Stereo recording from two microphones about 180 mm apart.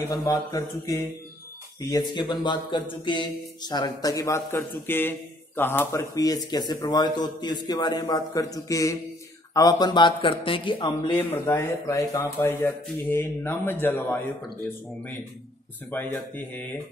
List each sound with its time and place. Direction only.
0.1 s speech: 15° left (ahead or behind)
15.9 s speech: 10° left (ahead or behind)